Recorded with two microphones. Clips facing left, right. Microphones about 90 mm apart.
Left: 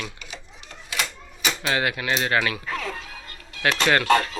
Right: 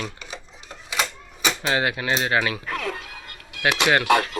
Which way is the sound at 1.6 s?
25° right (ahead or behind).